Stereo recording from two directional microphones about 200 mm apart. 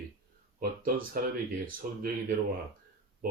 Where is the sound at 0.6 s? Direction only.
45° right (ahead or behind).